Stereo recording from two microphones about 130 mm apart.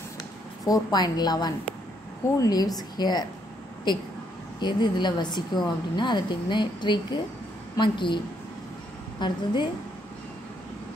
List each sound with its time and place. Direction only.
0.7 s a woman's voice: 30° left (ahead or behind)
4.6 s a woman's voice: 35° left (ahead or behind)
9.2 s a woman's voice: 35° left (ahead or behind)